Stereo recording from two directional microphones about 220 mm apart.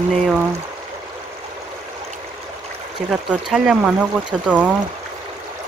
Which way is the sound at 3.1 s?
5° right (ahead or behind).